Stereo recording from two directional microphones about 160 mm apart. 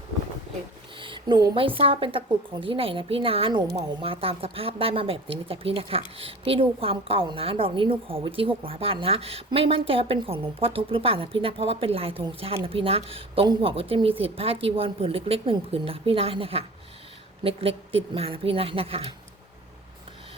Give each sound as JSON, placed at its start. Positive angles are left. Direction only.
{"t": 0.9, "sound": "speech", "side_deg": -30}